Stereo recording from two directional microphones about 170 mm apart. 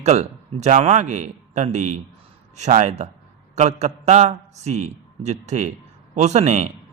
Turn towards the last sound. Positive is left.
turn(degrees=-45)  # may be behind; listen again after turning